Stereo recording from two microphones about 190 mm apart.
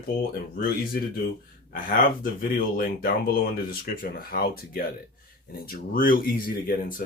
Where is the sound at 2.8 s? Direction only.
50° left (ahead or behind).